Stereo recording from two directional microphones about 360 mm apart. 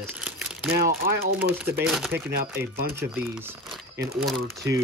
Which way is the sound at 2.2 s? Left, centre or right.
Right.